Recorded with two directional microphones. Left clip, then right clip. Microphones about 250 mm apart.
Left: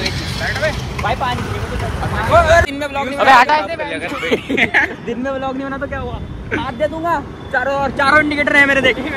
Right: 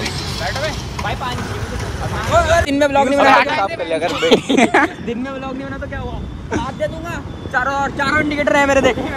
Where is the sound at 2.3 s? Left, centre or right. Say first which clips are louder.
Left 3 dB; left.